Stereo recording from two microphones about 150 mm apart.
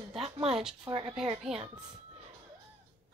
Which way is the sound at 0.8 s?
35° right (ahead or behind).